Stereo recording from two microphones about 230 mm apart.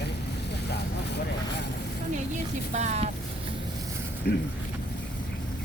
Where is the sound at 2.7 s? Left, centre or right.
Right.